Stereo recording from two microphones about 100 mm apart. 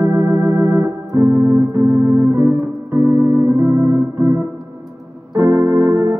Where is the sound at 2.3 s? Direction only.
25° right (ahead or behind).